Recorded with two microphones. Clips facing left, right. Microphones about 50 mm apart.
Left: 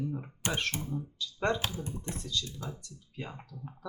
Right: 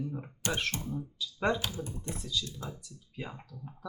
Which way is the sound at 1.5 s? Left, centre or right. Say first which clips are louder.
Left 1 dB; left.